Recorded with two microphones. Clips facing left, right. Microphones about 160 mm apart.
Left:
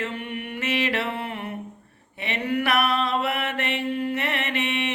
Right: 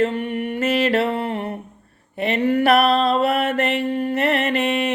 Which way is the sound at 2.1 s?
45° right (ahead or behind).